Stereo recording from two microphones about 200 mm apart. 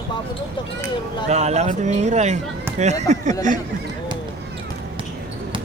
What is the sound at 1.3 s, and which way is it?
Speech, 35° right (ahead or behind).